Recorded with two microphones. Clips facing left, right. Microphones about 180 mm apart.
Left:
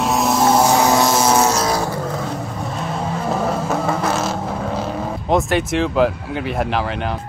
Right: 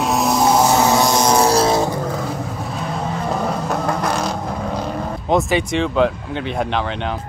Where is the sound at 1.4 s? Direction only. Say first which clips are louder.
Right 3 dB; 30° right (ahead or behind).